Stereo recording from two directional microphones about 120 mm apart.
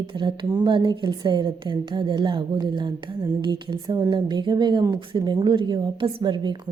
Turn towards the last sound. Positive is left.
turn(degrees=-40)  # may be behind; listen again after turning